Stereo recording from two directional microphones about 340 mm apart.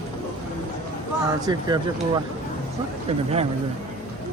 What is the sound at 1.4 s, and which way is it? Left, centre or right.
Speech, centre.